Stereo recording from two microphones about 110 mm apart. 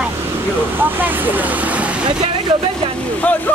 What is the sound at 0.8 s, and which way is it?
Speech, 15° right (ahead or behind).